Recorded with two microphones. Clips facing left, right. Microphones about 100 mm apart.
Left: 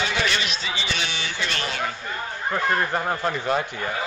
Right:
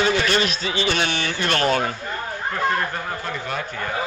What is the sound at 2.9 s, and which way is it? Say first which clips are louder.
Speech: left 4 dB; 30° left (ahead or behind).